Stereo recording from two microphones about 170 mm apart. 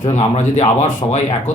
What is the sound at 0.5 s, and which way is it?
Speech, 45° left (ahead or behind).